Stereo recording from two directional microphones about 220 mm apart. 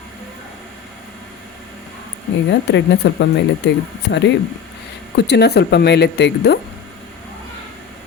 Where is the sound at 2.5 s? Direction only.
50° left (ahead or behind).